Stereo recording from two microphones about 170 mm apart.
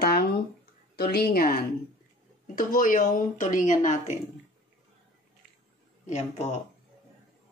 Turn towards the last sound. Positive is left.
turn(degrees=40)  # may be behind; listen again after turning